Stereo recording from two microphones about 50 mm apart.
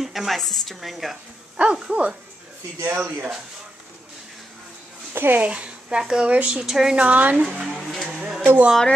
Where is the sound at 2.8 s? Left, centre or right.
Right.